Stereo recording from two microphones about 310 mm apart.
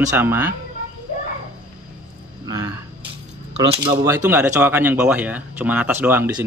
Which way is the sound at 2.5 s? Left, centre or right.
Centre.